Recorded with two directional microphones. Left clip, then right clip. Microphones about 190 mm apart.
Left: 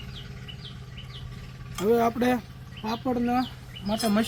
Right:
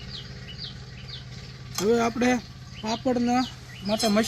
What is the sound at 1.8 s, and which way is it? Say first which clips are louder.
Speech: even; 20° right (ahead or behind).